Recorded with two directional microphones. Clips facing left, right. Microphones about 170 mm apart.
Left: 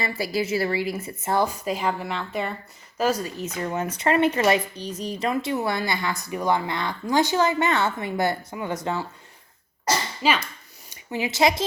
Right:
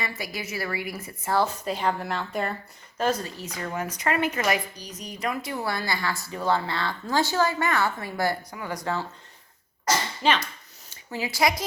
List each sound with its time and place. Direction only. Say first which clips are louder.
0.0 s speech: left 7 dB; 30° left (ahead or behind); by 2.5 s centre (ahead or behind)
3.0 s speech: left 2 dB; 15° left (ahead or behind)
9.8 s speech: left 1 dB; 10° left (ahead or behind)
10.8 s speech: left 4 dB; 20° left (ahead or behind)